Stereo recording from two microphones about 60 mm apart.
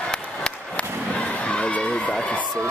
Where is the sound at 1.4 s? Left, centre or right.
Centre.